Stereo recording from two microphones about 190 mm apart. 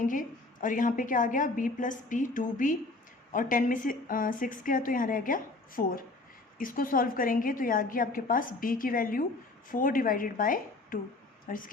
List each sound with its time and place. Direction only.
0.0 s a woman's voice: 45° left (ahead or behind)